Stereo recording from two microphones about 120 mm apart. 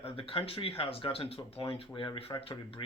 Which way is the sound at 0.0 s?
50° left (ahead or behind).